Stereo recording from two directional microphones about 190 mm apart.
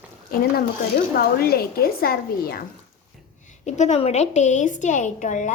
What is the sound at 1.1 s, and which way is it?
A woman's voice, 55° left (ahead or behind).